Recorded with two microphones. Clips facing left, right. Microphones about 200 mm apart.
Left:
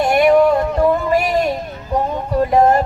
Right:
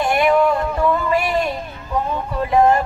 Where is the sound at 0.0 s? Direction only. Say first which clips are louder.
Left 4 dB; 40° left (ahead or behind).